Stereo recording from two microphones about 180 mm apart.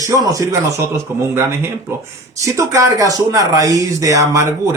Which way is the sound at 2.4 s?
15° right (ahead or behind).